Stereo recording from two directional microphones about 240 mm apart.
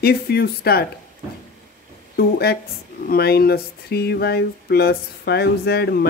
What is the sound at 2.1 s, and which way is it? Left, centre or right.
A woman's voice, left.